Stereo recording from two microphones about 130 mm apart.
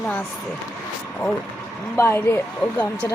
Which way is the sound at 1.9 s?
20° left (ahead or behind).